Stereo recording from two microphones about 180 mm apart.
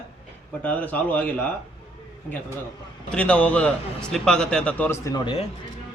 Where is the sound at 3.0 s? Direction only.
5° left (ahead or behind).